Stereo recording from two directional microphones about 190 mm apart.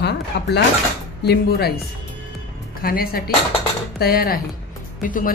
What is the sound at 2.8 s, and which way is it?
A woman's voice, 50° left (ahead or behind).